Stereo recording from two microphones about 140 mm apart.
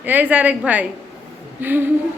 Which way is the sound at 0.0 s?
10° right (ahead or behind).